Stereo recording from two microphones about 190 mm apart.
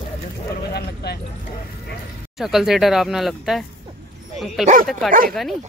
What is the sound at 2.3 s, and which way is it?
Speech, centre (ahead or behind).